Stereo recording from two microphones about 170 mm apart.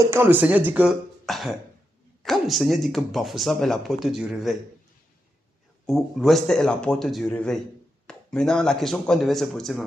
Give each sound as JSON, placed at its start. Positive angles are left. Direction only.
{"t": 0.0, "sound": "speech", "side_deg": -15}
{"t": 1.2, "sound": "cough", "side_deg": 0}
{"t": 2.2, "sound": "speech", "side_deg": 0}
{"t": 5.8, "sound": "speech", "side_deg": 0}